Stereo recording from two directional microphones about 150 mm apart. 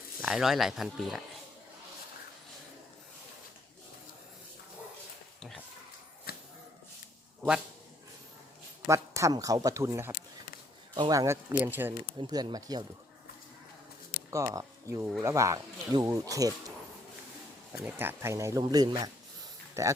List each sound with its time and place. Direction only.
0.2 s speech: centre (ahead or behind)
6.3 s a sound: 90° left
8.9 s speech: 20° right (ahead or behind)
10.9 s speech: 30° right (ahead or behind)
12.3 s speech: 25° right (ahead or behind)
14.3 s speech: 20° right (ahead or behind)
17.7 s speech: 10° right (ahead or behind)